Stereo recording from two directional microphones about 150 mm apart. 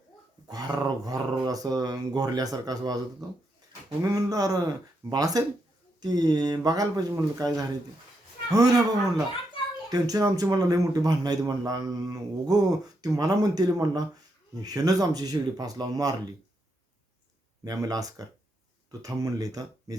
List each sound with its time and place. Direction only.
0.4 s speech: 25° right (ahead or behind)
9.9 s speech: 25° right (ahead or behind)
17.6 s speech: 25° right (ahead or behind)